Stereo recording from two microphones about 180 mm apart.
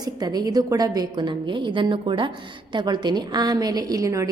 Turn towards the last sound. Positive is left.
turn(degrees=-20)  # may be behind; listen again after turning